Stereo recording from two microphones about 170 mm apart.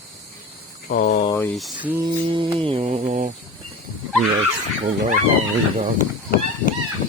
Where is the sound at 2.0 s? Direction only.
30° right (ahead or behind).